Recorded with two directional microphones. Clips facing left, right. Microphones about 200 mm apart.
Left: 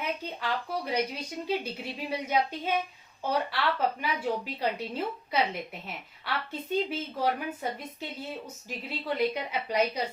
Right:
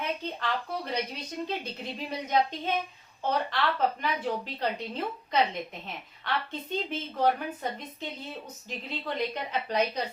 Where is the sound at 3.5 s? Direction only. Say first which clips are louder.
Right 1 dB; 10° left (ahead or behind).